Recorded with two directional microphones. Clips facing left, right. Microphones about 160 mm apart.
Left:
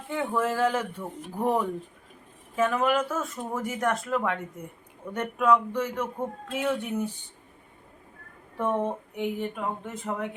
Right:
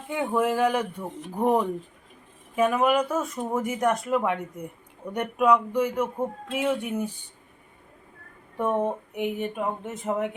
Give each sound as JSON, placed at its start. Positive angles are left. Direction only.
{"t": 0.1, "sound": "speech", "side_deg": -15}
{"t": 8.5, "sound": "speech", "side_deg": -15}